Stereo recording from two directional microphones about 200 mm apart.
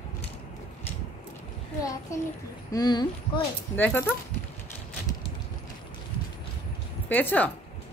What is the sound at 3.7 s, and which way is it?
Speech, 10° left (ahead or behind).